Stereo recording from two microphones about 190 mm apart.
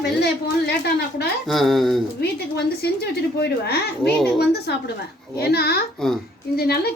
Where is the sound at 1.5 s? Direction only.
Centre (ahead or behind).